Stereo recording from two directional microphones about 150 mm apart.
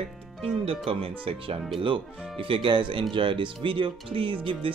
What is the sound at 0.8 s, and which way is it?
Speech, 40° right (ahead or behind).